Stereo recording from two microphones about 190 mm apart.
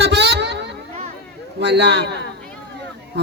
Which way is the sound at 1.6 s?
65° right (ahead or behind).